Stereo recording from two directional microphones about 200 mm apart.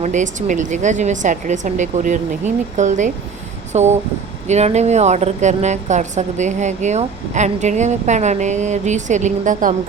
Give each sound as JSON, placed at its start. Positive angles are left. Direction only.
{"t": 0.0, "sound": "a woman's voice", "side_deg": -35}